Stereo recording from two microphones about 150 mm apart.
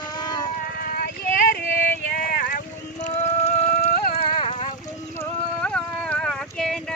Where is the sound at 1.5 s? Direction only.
65° left (ahead or behind).